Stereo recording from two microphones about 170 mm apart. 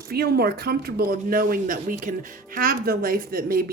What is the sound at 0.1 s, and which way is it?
A woman's voice, 65° right (ahead or behind).